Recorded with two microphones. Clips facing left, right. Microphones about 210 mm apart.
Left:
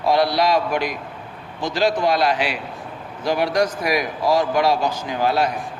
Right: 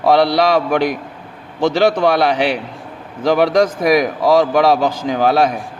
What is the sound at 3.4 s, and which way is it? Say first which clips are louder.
A man's voice: right 6 dB; 90° right.